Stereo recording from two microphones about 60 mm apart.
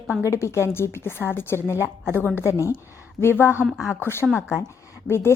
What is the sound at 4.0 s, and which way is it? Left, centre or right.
Speech, left.